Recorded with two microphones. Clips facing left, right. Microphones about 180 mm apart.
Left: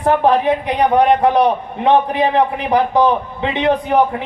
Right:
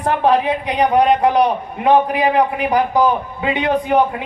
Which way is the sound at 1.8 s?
25° left (ahead or behind).